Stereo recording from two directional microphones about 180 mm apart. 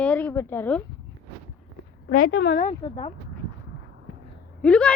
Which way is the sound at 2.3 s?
75° left (ahead or behind).